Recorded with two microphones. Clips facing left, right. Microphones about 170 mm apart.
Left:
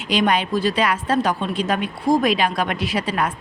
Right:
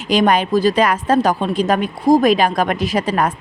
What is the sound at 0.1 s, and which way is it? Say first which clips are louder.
A woman's voice: right 5 dB; 45° right (ahead or behind).